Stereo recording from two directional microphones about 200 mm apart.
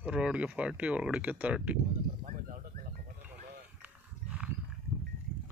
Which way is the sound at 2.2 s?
40° right (ahead or behind).